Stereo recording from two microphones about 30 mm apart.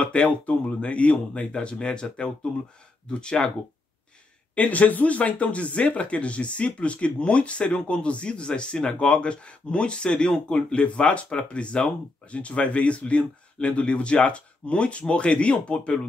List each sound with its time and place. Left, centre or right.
0.0 s speech: left
4.6 s speech: left